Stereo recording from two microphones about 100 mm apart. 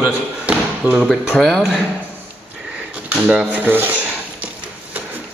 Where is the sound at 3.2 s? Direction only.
10° right (ahead or behind).